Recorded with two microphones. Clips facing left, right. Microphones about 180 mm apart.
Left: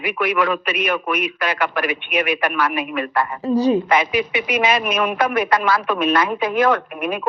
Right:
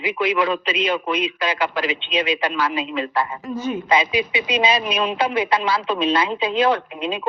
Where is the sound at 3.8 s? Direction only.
15° right (ahead or behind).